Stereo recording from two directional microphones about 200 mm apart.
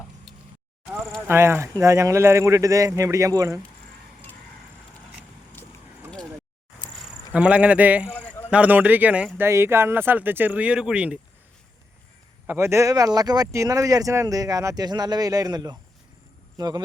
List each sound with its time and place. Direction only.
0.3 s a sound: centre (ahead or behind)
1.3 s speech: 10° right (ahead or behind)
7.3 s speech: 5° right (ahead or behind)
12.5 s speech: 15° right (ahead or behind)